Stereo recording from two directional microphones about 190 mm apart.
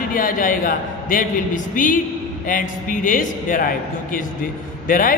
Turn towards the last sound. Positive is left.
turn(degrees=45)  # may be behind; listen again after turning